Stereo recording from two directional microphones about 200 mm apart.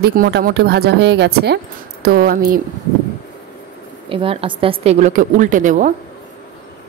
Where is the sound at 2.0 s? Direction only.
45° right (ahead or behind).